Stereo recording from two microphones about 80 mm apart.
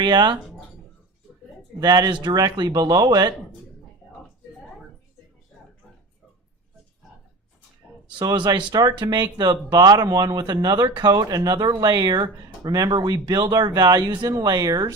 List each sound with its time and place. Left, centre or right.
0.0 s speech: right
1.8 s speech: right
8.2 s speech: right